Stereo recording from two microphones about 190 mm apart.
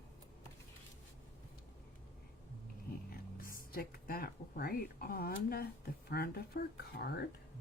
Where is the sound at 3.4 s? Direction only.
50° left (ahead or behind).